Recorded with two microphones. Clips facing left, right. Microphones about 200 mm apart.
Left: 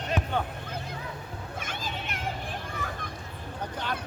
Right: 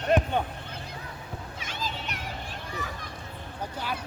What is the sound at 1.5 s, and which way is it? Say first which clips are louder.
Children playing: left 1 dB; 50° left (ahead or behind).